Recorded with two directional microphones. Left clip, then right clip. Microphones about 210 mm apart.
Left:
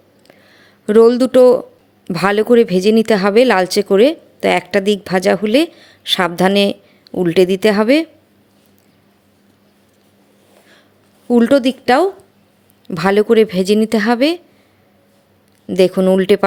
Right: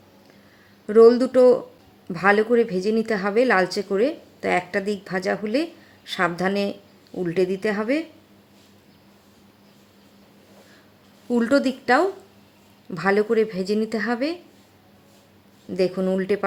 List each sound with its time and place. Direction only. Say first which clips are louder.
0.9 s speech: left 4 dB; 35° left (ahead or behind)
11.3 s speech: left 8 dB; 30° left (ahead or behind)
15.7 s speech: left 10 dB; 35° left (ahead or behind)